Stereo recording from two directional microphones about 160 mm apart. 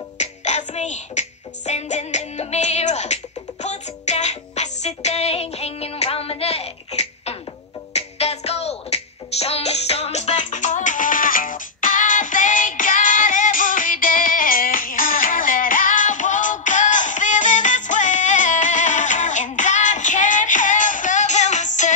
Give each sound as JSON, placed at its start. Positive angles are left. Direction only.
{"t": 0.2, "sound": "music", "side_deg": 45}